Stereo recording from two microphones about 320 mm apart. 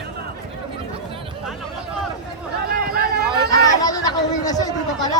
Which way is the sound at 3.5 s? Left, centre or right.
Centre.